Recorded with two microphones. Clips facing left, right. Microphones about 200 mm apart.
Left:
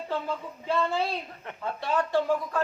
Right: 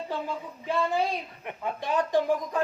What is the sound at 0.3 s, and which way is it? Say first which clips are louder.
A woman's voice: left 1 dB; 15° right (ahead or behind).